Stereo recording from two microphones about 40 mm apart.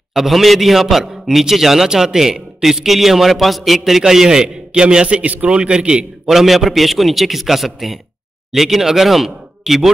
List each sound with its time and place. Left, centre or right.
0.1 s a man's voice: centre; by 6.0 s right
6.2 s a man's voice: centre